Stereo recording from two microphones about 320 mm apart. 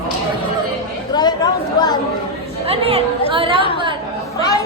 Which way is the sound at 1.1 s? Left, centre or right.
Centre.